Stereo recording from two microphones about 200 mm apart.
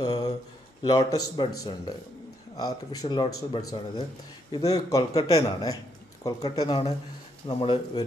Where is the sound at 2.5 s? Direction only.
20° left (ahead or behind).